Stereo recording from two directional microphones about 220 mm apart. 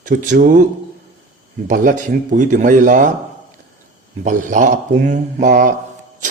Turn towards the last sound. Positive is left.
turn(degrees=-35)  # may be behind; listen again after turning